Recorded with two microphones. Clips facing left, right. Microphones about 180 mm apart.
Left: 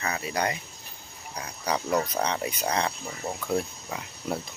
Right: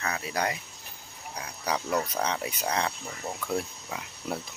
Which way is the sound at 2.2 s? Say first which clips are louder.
Left 2 dB; centre (ahead or behind).